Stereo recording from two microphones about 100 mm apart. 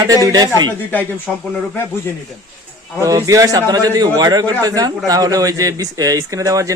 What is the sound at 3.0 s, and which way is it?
A man's voice, 35° right (ahead or behind).